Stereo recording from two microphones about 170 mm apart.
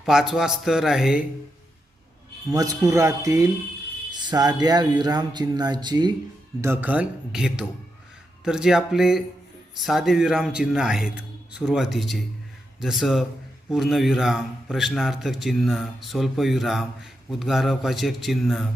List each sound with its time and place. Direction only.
0.0 s a man's voice: centre (ahead or behind)
2.5 s speech: 20° right (ahead or behind)
6.6 s a man's voice: 10° right (ahead or behind)